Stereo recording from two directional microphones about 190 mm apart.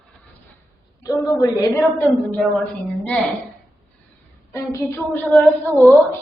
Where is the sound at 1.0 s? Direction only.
15° left (ahead or behind).